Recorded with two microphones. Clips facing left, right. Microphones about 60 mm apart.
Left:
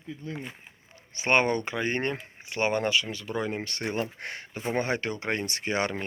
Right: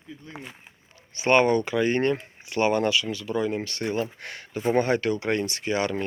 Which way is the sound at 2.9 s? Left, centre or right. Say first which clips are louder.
Right 2 dB; left.